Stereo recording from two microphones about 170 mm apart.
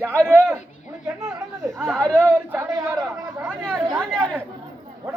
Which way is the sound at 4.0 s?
5° left (ahead or behind).